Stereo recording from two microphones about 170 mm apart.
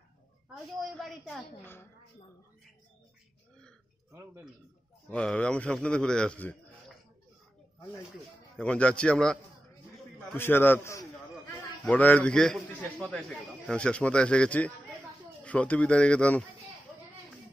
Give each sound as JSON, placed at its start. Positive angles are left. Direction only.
{"t": 0.7, "sound": "a sound", "side_deg": 0}
{"t": 1.6, "sound": "speech", "side_deg": 10}
{"t": 4.1, "sound": "speech", "side_deg": -15}
{"t": 5.1, "sound": "a man's voice", "side_deg": 5}
{"t": 8.5, "sound": "a man's voice", "side_deg": 5}